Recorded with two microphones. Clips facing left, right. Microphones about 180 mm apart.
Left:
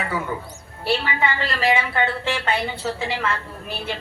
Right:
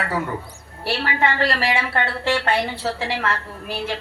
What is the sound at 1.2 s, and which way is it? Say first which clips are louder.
A woman's voice: right 2 dB; 80° right.